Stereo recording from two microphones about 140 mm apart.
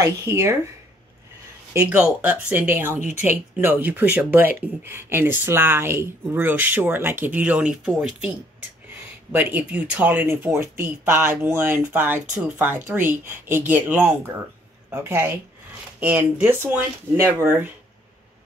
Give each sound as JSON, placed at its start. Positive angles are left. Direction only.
{"t": 0.0, "sound": "speech", "side_deg": -20}
{"t": 1.7, "sound": "speech", "side_deg": -15}
{"t": 9.3, "sound": "speech", "side_deg": -10}